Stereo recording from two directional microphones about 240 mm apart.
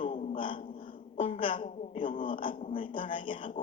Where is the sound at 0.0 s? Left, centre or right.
Left.